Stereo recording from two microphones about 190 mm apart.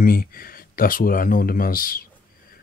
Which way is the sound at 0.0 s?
50° left (ahead or behind).